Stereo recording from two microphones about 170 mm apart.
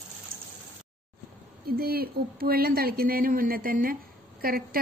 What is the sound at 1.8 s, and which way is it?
Speech, 60° right (ahead or behind).